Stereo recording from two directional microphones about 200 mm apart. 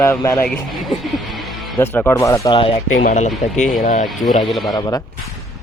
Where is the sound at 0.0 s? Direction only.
15° left (ahead or behind).